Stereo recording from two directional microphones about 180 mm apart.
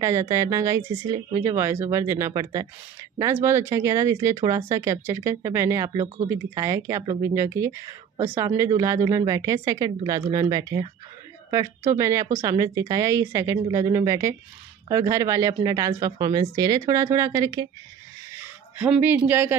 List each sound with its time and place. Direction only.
0.0 s a woman's voice: 15° right (ahead or behind)
18.4 s owl: 10° right (ahead or behind)
19.2 s speech: 15° right (ahead or behind)